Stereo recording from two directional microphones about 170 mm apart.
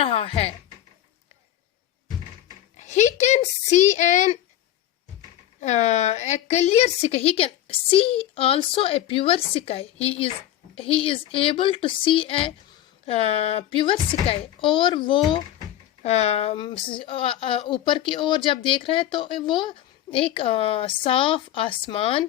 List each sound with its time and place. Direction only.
0.0 s music: 35° left (ahead or behind)
2.7 s speech: 45° left (ahead or behind)
5.5 s a woman's voice: 45° left (ahead or behind)